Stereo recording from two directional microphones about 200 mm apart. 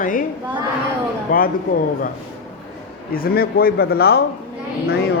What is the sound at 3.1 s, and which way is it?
Speech, 50° left (ahead or behind).